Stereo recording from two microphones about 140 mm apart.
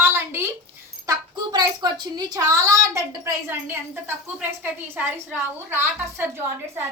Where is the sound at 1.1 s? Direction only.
30° right (ahead or behind).